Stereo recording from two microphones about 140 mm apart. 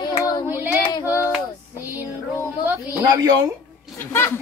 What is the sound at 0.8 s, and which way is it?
Female singing, 25° left (ahead or behind).